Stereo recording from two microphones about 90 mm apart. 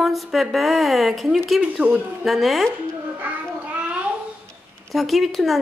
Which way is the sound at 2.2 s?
Centre (ahead or behind).